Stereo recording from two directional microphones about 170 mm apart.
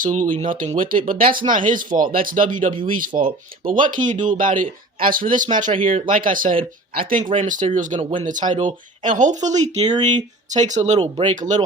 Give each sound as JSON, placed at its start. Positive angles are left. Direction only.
{"t": 0.0, "sound": "speech", "side_deg": -50}
{"t": 3.1, "sound": "speech", "side_deg": -40}